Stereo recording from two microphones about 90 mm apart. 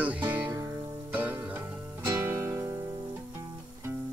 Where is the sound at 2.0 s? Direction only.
30° right (ahead or behind).